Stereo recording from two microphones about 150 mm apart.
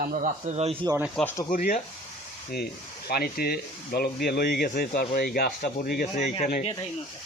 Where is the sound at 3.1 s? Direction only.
90° left.